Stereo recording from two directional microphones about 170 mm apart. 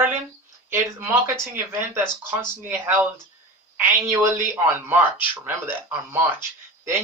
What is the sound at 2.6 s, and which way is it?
Speech, 15° right (ahead or behind).